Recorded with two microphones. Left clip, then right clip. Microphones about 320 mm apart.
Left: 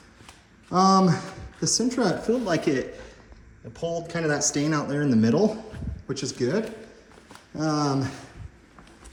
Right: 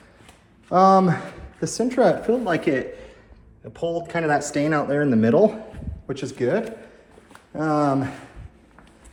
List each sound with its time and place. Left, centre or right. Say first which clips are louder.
0.7 s speech: right 5 dB; centre